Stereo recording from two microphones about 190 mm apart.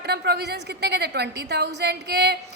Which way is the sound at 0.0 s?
60° right (ahead or behind).